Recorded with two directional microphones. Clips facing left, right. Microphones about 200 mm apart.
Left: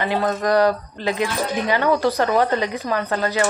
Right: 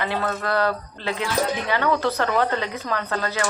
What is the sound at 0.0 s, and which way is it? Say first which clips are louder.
Speech: left 5 dB; 15° left (ahead or behind).